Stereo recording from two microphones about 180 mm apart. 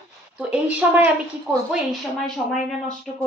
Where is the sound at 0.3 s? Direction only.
5° right (ahead or behind).